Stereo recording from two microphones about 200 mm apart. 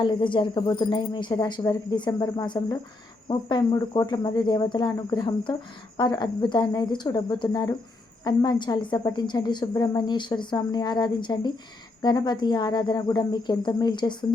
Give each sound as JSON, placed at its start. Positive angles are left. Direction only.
{"t": 0.0, "sound": "a woman's voice", "side_deg": 25}